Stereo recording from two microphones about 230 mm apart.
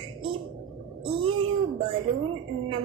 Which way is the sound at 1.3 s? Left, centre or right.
Right.